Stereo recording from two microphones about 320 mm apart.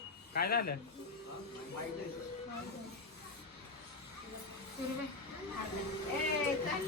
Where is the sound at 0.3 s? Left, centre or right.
Left.